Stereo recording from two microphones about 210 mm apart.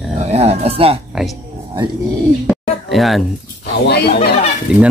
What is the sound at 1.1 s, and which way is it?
Speech, centre (ahead or behind).